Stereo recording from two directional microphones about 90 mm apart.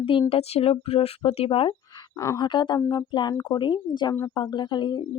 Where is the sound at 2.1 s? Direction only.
35° left (ahead or behind).